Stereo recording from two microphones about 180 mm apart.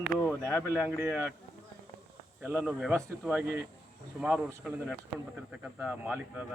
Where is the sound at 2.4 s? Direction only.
10° right (ahead or behind).